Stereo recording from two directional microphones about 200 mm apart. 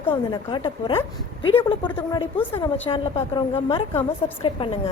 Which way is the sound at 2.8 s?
25° left (ahead or behind).